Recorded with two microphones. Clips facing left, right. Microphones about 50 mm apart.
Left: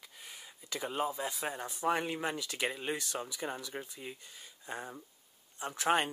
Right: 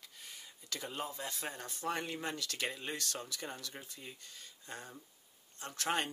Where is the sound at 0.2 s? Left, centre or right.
Centre.